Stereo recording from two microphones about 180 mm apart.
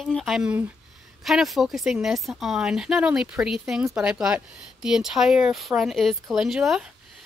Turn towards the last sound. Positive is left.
turn(degrees=0)  # may be behind; listen again after turning